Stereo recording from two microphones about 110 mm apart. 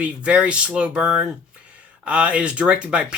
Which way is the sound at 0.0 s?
10° right (ahead or behind).